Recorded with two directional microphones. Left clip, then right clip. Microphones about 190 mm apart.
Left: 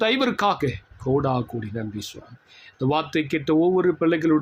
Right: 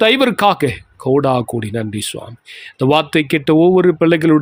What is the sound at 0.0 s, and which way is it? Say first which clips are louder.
Speech: right 9 dB; 50° right (ahead or behind).